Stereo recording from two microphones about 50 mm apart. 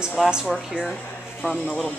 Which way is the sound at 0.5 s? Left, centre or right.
Centre.